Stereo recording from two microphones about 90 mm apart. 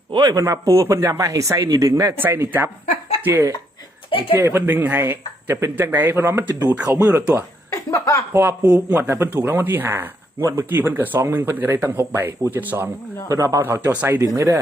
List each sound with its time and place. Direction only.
0.1 s speech: 45° right (ahead or behind)
2.1 s speech: 25° right (ahead or behind)
7.7 s a sound: 35° left (ahead or behind)
8.3 s speech: 25° right (ahead or behind)
13.2 s speech: 35° right (ahead or behind)